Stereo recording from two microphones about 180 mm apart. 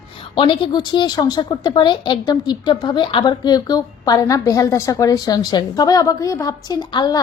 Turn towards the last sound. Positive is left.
turn(degrees=25)  # may be behind; listen again after turning